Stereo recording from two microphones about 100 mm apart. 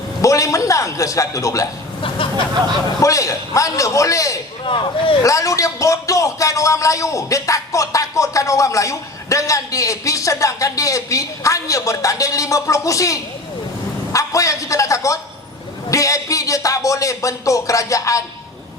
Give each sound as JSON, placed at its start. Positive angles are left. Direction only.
{"t": 0.2, "sound": "a man's voice", "side_deg": 35}
{"t": 3.0, "sound": "speech", "side_deg": 35}
{"t": 4.6, "sound": "speech", "side_deg": 60}
{"t": 5.2, "sound": "a man's voice", "side_deg": 35}